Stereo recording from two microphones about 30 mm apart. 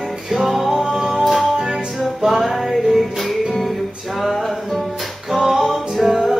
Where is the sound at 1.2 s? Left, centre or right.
Centre.